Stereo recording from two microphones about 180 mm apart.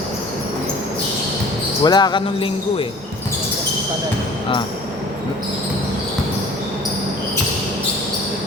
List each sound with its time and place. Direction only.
1.8 s speech: 25° left (ahead or behind)